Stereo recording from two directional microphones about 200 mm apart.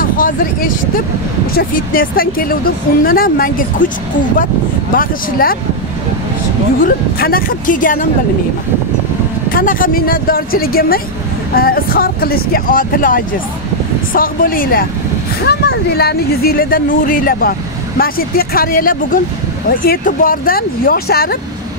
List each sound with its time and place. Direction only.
0.0 s speech: 45° left (ahead or behind)
4.9 s speech: 45° left (ahead or behind)
6.8 s speech: 45° left (ahead or behind)
9.5 s speech: 45° left (ahead or behind)